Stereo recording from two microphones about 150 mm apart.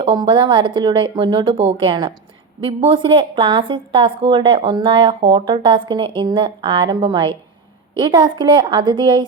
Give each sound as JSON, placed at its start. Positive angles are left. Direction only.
{"t": 0.0, "sound": "a woman's voice", "side_deg": -30}